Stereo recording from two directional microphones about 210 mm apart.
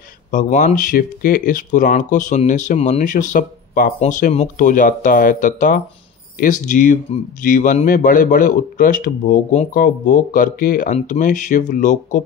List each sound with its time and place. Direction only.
0.3 s speech: 40° left (ahead or behind)